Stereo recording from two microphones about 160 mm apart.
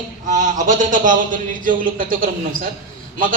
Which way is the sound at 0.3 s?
50° right (ahead or behind).